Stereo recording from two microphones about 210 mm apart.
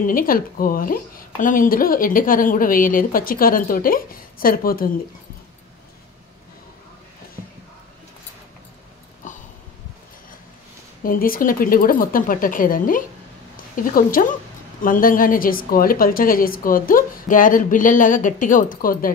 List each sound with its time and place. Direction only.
0.0 s a woman's voice: 40° left (ahead or behind)
9.2 s a sound: 35° left (ahead or behind)
11.0 s a woman's voice: 45° left (ahead or behind)
14.2 s a woman's voice: 40° left (ahead or behind)